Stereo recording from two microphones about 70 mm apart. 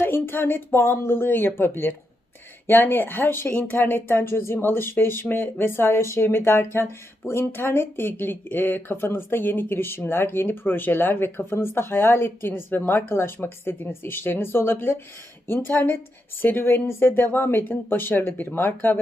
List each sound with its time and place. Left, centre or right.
0.0 s speech: left
3.5 s speech: centre
3.8 s speech: left